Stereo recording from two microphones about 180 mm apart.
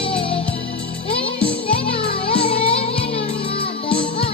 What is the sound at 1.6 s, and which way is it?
Music, 30° left (ahead or behind).